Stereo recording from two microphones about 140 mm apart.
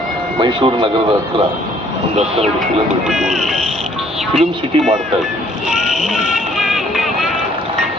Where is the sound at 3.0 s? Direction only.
Centre (ahead or behind).